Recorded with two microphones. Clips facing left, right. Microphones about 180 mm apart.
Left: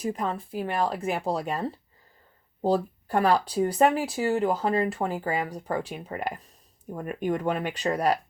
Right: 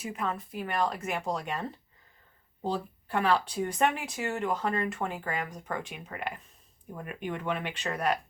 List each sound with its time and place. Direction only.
0.0 s speech: 35° left (ahead or behind)